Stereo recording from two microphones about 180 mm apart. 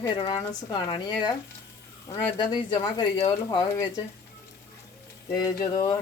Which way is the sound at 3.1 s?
35° left (ahead or behind).